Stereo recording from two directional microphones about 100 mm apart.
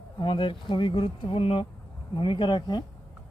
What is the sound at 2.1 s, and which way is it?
Speech, 55° left (ahead or behind).